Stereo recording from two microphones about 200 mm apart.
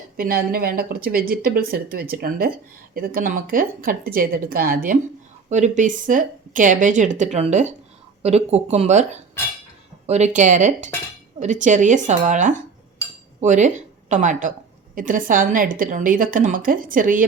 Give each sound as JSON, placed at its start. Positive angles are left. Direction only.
{"t": 0.2, "sound": "a woman's voice", "side_deg": -45}